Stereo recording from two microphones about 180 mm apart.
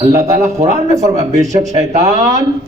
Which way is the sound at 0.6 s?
40° right (ahead or behind).